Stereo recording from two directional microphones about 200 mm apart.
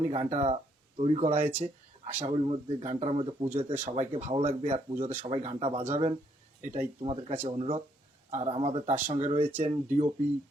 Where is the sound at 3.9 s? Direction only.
30° right (ahead or behind).